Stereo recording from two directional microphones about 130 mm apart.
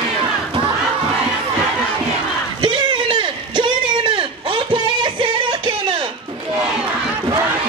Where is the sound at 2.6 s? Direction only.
40° right (ahead or behind).